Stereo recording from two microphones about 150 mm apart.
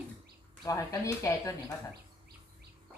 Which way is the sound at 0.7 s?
20° left (ahead or behind).